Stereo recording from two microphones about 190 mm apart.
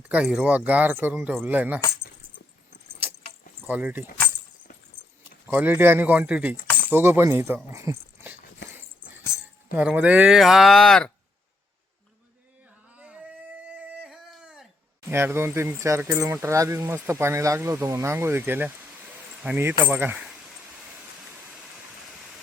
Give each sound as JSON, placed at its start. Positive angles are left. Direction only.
{"t": 0.1, "sound": "speech", "side_deg": -5}
{"t": 3.7, "sound": "speech", "side_deg": -10}
{"t": 5.5, "sound": "speech", "side_deg": -10}
{"t": 9.7, "sound": "speech", "side_deg": -10}
{"t": 13.7, "sound": "a sound", "side_deg": -5}
{"t": 15.1, "sound": "speech", "side_deg": -15}